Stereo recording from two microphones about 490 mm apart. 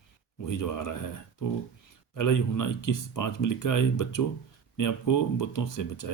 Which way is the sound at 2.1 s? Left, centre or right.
Left.